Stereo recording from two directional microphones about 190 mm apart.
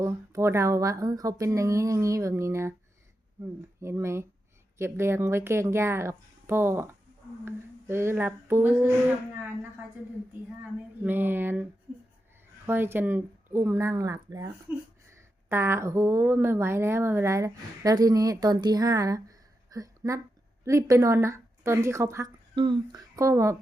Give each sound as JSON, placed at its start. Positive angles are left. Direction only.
{"t": 0.0, "sound": "a woman's voice", "side_deg": -15}
{"t": 3.8, "sound": "a woman's voice", "side_deg": -15}
{"t": 11.0, "sound": "a woman's voice", "side_deg": -10}